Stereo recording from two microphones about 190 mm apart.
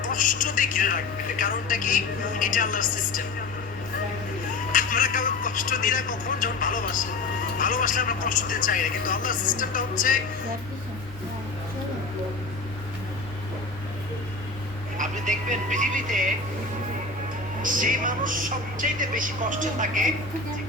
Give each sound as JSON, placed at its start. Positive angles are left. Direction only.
{"t": 0.0, "sound": "a woman's voice", "side_deg": 45}
{"t": 4.7, "sound": "speech", "side_deg": 45}
{"t": 14.9, "sound": "vehicle", "side_deg": -40}
{"t": 17.6, "sound": "speech", "side_deg": -45}